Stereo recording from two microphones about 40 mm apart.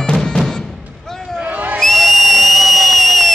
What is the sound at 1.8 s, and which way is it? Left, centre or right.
Whistle, centre.